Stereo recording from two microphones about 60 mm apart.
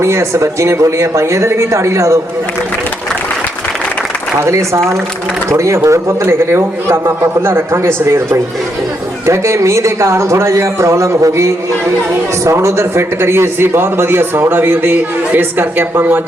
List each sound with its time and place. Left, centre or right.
0.0 s speech: right
4.4 s a man's voice: right